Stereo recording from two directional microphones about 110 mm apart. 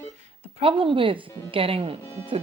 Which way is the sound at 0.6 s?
50° right (ahead or behind).